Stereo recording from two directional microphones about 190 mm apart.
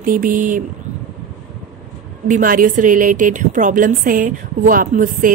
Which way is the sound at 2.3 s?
45° right (ahead or behind).